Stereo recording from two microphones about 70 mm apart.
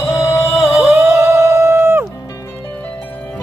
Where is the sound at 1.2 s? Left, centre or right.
Right.